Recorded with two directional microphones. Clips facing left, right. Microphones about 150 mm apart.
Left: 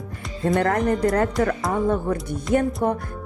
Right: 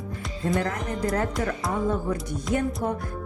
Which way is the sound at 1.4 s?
60° left (ahead or behind).